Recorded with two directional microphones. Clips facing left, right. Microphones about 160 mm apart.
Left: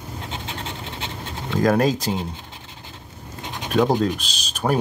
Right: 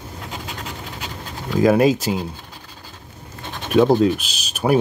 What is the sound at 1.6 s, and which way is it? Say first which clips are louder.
Speech: right 4 dB; 5° right (ahead or behind).